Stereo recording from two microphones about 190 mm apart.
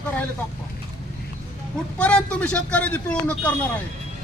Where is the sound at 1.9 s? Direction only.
5° left (ahead or behind).